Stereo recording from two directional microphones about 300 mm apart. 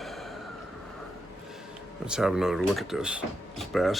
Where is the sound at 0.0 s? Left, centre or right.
Centre.